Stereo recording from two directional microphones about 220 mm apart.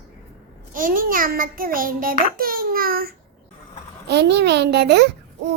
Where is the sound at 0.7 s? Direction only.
40° right (ahead or behind).